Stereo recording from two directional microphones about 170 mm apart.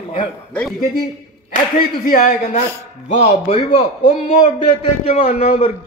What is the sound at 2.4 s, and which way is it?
A man's voice, 45° left (ahead or behind).